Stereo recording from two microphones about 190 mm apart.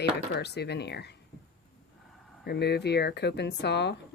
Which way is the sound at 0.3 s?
60° left (ahead or behind).